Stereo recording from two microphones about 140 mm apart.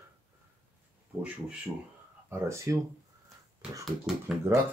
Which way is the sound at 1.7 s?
Centre (ahead or behind).